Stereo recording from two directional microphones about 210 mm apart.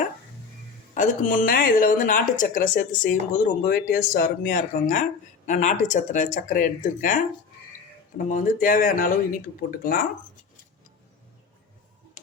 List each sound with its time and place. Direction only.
0.9 s speech: 40° left (ahead or behind)
8.3 s speech: 40° left (ahead or behind)